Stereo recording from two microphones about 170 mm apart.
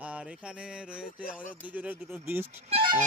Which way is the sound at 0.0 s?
5° right (ahead or behind).